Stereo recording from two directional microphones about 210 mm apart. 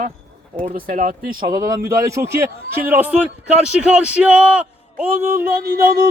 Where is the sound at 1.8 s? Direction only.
15° right (ahead or behind).